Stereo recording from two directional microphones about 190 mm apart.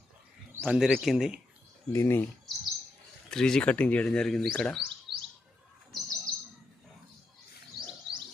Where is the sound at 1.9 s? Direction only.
15° left (ahead or behind).